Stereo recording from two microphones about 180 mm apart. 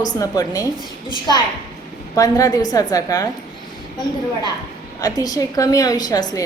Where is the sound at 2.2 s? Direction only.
20° left (ahead or behind).